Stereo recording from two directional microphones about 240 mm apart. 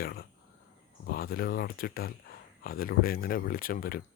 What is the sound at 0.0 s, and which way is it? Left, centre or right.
Speech, left.